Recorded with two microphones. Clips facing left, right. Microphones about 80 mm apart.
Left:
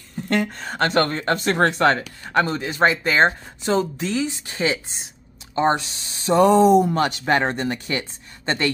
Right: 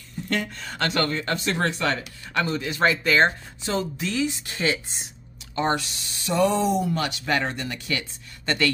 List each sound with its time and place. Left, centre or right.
0.3 s speech: left
6.4 s speech: left